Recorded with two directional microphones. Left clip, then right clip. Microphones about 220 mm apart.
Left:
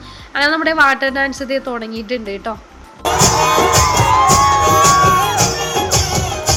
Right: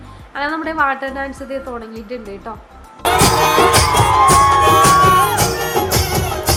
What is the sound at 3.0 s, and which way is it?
Music, 25° right (ahead or behind).